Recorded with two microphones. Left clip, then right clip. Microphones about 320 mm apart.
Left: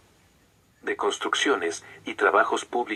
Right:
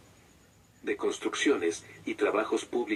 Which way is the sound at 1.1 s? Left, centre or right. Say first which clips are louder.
Left 4 dB; left.